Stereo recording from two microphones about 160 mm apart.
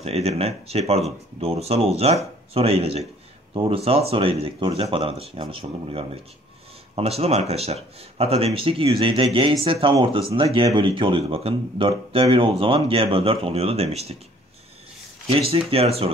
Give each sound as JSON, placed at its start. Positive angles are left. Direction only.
{"t": 0.0, "sound": "speech", "side_deg": -40}
{"t": 15.2, "sound": "speech", "side_deg": -35}